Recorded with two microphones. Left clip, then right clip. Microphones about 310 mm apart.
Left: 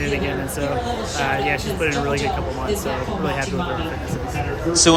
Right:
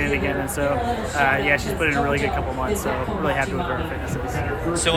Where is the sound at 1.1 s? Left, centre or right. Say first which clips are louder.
Right 3 dB; centre.